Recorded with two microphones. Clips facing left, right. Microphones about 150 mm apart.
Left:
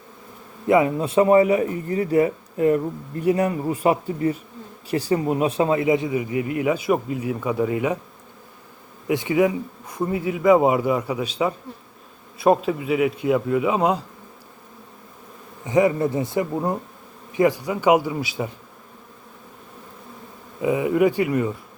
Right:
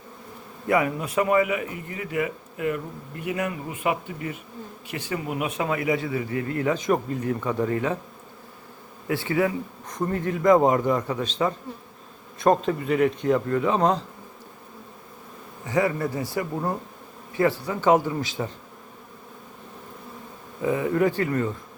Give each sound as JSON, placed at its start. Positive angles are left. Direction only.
{"t": 0.7, "sound": "a man's voice", "side_deg": 25}
{"t": 9.0, "sound": "speech", "side_deg": 15}
{"t": 15.6, "sound": "speech", "side_deg": 20}
{"t": 20.6, "sound": "speech", "side_deg": 15}